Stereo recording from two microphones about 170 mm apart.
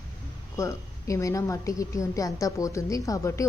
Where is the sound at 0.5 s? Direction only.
15° left (ahead or behind).